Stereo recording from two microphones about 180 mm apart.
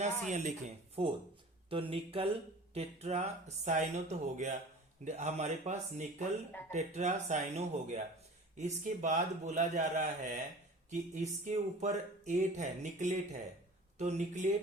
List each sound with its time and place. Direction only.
0.0 s speech: 40° right (ahead or behind)
6.5 s speech: 10° left (ahead or behind)
6.7 s speech: 40° right (ahead or behind)